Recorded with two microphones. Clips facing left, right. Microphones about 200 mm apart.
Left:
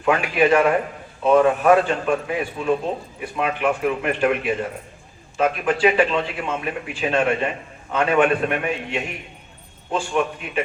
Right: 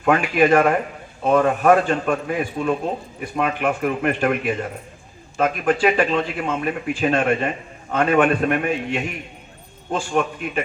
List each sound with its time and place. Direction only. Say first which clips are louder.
0.0 s a man's voice: right 1 dB; 45° right (ahead or behind)